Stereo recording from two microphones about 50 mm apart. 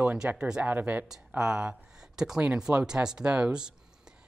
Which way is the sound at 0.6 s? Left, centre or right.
Right.